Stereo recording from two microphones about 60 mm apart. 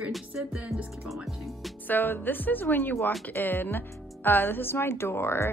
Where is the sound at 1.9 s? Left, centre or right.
Left.